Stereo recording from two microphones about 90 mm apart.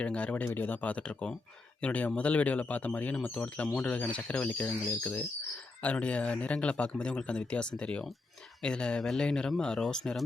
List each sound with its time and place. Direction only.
0.0 s speech: 15° left (ahead or behind)